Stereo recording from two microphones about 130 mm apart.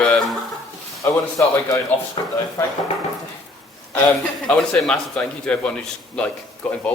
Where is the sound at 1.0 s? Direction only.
25° left (ahead or behind).